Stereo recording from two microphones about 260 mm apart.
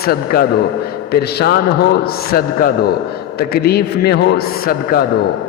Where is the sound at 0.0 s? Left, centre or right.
Left.